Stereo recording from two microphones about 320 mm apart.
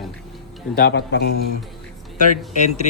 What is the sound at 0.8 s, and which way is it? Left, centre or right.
Speech, left.